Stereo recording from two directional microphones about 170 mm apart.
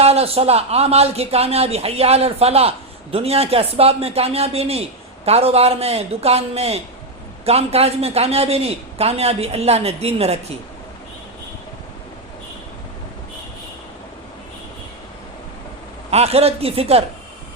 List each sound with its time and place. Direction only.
0.0 s a man's voice: 35° right (ahead or behind)
16.0 s a man's voice: 35° right (ahead or behind)